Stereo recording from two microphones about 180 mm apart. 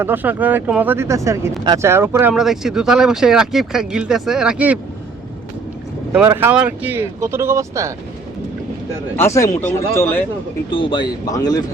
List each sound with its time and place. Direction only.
0.0 s speech: 10° right (ahead or behind)
6.1 s speech: 10° right (ahead or behind)
9.1 s speech: 15° left (ahead or behind)
10.7 s speech: 30° left (ahead or behind)